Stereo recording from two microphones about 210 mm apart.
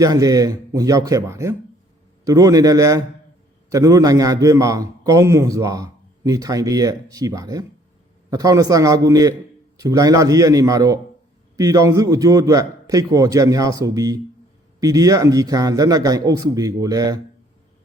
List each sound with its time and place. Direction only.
0.0 s a man's voice: 15° right (ahead or behind)